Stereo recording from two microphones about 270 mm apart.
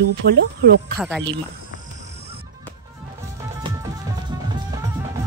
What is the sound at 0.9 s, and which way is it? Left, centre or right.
Speech, centre.